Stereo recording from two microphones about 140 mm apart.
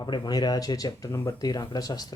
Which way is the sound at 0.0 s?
30° left (ahead or behind).